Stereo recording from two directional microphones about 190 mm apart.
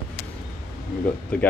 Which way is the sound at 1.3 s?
5° left (ahead or behind).